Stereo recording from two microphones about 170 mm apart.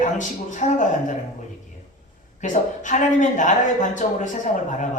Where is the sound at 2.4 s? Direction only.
45° left (ahead or behind).